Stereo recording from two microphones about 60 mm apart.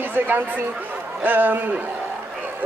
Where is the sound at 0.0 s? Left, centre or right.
Right.